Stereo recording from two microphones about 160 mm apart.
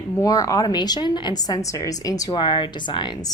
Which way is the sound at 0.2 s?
20° left (ahead or behind).